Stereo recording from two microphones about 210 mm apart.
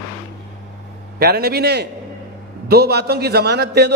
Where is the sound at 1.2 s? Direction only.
50° right (ahead or behind).